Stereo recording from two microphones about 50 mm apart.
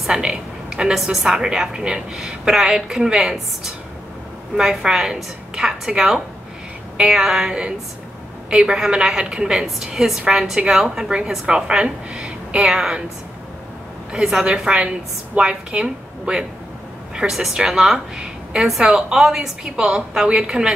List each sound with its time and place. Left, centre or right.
0.2 s a sound: centre
1.0 s a woman's voice: centre
14.1 s a woman's voice: centre
14.4 s a woman's voice: centre